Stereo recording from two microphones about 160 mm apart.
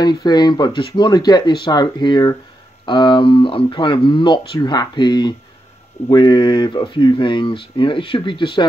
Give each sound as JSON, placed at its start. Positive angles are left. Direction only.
{"t": 0.0, "sound": "speech", "side_deg": 25}